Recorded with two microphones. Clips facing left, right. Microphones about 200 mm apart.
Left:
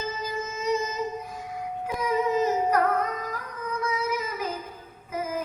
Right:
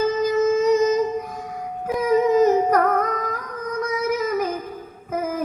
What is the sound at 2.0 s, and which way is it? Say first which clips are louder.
Music: right 8 dB; 50° right (ahead or behind).